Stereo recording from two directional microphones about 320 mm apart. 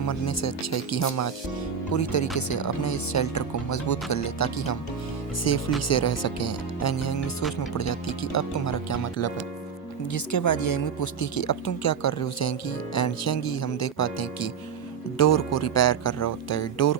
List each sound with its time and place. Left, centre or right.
0.1 s speech: left
10.1 s speech: left